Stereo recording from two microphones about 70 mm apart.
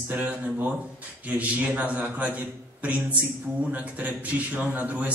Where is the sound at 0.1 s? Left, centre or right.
Right.